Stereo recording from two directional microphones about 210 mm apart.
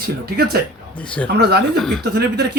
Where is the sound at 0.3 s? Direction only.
50° right (ahead or behind).